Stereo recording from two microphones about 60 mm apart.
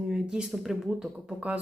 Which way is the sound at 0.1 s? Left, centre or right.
Centre.